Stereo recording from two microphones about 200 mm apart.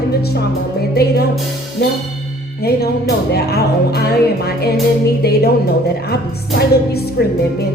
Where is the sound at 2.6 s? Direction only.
50° left (ahead or behind).